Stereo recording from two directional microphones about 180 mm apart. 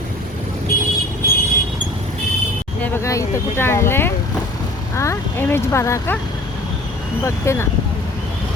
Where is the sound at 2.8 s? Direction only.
15° left (ahead or behind).